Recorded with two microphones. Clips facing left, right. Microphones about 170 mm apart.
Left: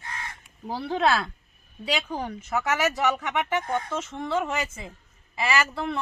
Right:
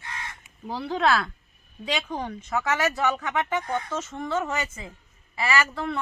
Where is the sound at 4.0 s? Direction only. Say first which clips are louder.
Even; 5° right (ahead or behind).